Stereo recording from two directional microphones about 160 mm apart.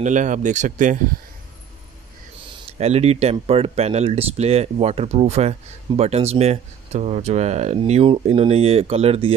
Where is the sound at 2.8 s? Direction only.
40° right (ahead or behind).